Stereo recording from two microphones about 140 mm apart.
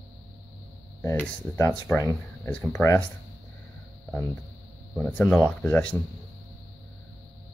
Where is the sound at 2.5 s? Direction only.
10° left (ahead or behind).